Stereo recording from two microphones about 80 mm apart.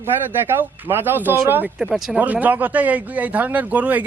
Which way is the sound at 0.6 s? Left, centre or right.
Right.